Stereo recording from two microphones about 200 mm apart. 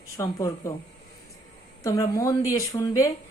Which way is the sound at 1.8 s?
15° left (ahead or behind).